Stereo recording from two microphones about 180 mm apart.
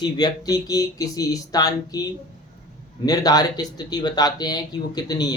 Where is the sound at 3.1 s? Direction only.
20° left (ahead or behind).